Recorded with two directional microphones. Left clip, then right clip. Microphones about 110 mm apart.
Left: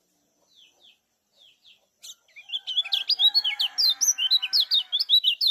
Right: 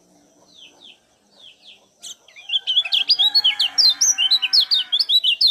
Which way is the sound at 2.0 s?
20° right (ahead or behind).